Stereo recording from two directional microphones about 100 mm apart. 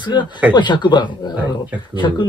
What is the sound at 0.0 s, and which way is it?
Speech, 50° left (ahead or behind).